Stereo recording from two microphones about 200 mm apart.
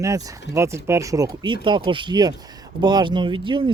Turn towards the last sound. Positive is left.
turn(degrees=-25)  # may be behind; listen again after turning